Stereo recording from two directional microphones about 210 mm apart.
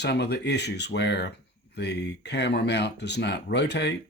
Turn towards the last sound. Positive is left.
turn(degrees=55)  # may be behind; listen again after turning